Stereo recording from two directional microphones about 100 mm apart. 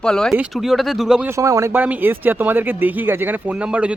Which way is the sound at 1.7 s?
20° right (ahead or behind).